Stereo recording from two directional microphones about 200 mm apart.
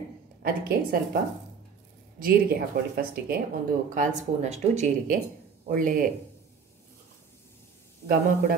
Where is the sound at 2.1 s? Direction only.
50° right (ahead or behind).